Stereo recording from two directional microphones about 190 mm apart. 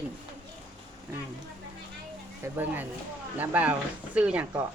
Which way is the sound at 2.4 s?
10° right (ahead or behind).